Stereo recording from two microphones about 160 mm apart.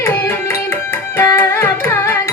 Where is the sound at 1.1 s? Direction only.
15° left (ahead or behind).